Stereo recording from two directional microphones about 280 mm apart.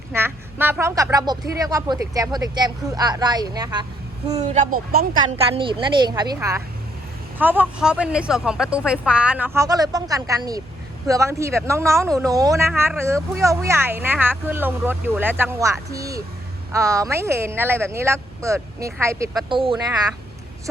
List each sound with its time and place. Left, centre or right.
0.1 s speech: centre
4.5 s speech: right
5.4 s speech: centre